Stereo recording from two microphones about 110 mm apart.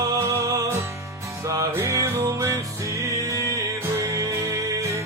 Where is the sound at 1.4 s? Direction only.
25° right (ahead or behind).